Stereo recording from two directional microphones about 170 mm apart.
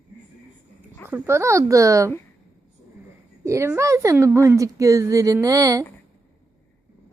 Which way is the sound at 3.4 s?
15° right (ahead or behind).